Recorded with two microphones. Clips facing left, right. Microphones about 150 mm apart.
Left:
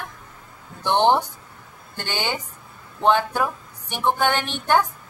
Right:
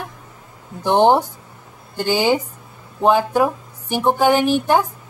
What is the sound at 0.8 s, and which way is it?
Speech, 35° right (ahead or behind).